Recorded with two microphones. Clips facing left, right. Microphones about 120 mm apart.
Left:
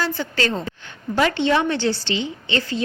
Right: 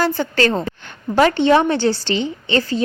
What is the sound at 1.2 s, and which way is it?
A woman's voice, 40° right (ahead or behind).